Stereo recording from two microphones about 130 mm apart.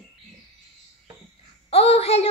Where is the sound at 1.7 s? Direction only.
50° left (ahead or behind).